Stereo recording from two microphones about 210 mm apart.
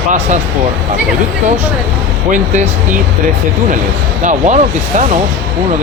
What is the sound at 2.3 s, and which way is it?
Speech, 35° right (ahead or behind).